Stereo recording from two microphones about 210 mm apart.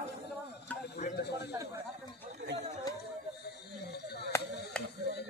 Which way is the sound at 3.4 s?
50° left (ahead or behind).